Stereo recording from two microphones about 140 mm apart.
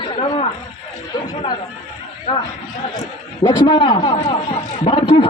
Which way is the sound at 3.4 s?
35° left (ahead or behind).